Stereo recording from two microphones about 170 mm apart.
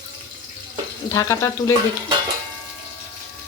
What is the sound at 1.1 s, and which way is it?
Speech, 20° left (ahead or behind).